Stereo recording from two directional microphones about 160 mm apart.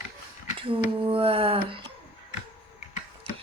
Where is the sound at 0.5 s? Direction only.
35° right (ahead or behind).